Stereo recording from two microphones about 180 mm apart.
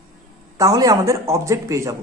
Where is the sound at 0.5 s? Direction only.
20° right (ahead or behind).